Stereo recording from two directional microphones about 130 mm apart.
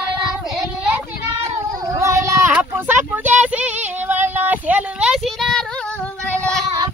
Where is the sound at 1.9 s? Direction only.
25° right (ahead or behind).